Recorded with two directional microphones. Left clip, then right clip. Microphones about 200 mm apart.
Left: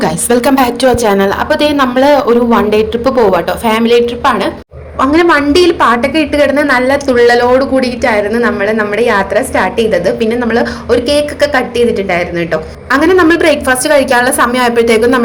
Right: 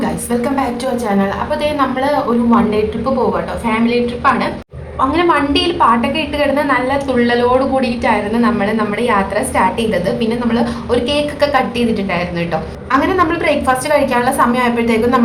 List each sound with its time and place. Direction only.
0.0 s a woman's voice: 40° left (ahead or behind)
4.9 s a woman's voice: 20° left (ahead or behind)
12.9 s a woman's voice: 25° left (ahead or behind)